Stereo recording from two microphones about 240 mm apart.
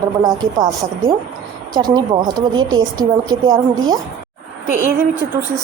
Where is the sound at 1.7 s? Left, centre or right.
Centre.